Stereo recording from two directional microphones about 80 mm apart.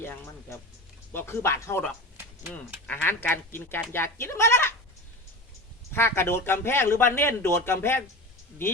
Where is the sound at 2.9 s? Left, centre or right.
Left.